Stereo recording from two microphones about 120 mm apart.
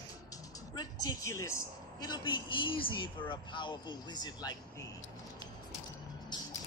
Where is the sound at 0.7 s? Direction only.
30° left (ahead or behind).